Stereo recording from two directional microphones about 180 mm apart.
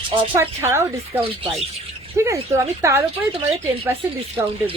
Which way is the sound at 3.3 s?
30° right (ahead or behind).